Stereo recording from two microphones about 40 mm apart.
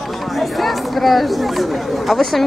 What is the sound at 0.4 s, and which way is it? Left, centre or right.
Speech, centre.